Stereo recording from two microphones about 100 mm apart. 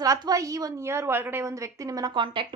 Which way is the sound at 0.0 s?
35° right (ahead or behind).